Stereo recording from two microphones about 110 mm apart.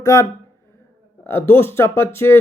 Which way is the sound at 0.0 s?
30° left (ahead or behind).